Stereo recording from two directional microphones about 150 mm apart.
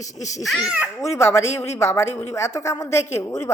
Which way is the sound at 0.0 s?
55° left (ahead or behind).